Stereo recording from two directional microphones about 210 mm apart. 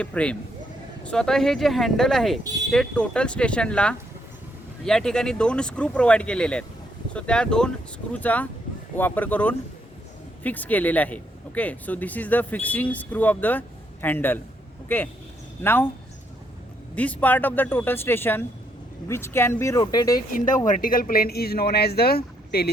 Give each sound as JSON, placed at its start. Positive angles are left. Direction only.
{"t": 0.0, "sound": "speech", "side_deg": 5}
{"t": 16.9, "sound": "speech", "side_deg": 5}
{"t": 20.7, "sound": "speech", "side_deg": 40}